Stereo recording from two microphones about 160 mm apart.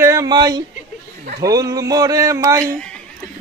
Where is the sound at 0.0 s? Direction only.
20° right (ahead or behind).